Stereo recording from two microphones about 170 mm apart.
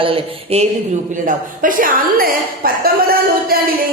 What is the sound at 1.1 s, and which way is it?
A woman's voice, 50° right (ahead or behind).